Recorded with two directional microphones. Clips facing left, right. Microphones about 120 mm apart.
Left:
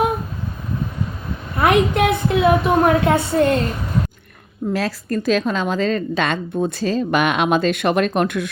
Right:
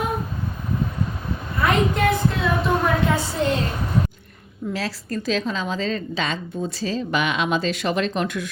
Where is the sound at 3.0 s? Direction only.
60° left (ahead or behind).